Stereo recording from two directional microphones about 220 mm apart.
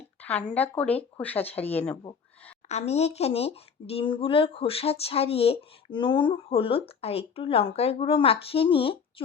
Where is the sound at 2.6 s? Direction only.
30° left (ahead or behind).